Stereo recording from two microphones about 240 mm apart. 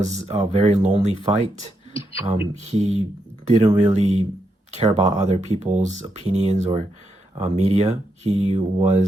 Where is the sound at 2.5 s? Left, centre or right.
Right.